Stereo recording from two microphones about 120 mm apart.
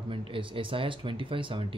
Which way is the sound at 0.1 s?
45° right (ahead or behind).